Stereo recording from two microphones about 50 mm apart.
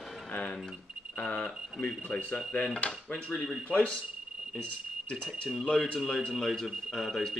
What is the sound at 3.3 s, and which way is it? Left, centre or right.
Speech, centre.